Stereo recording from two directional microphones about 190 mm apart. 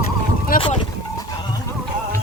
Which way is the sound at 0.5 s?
50° left (ahead or behind).